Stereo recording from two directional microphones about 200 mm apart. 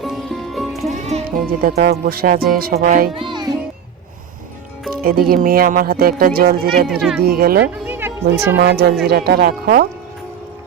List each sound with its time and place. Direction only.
0.0 s music: centre (ahead or behind)
0.9 s music: 35° right (ahead or behind)
1.5 s speech: 50° right (ahead or behind)
3.2 s a child's voice: 25° right (ahead or behind)
5.0 s speech: 50° right (ahead or behind)
7.9 s music: 10° right (ahead or behind)
8.5 s speech: 55° right (ahead or behind)